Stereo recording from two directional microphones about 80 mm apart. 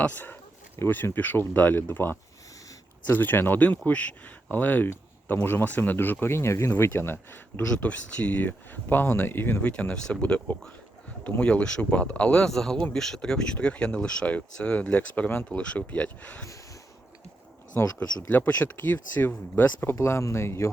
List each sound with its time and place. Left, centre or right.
0.0 s speech: left
7.7 s speech: centre
12.5 s speech: centre
17.7 s speech: left
20.0 s speech: left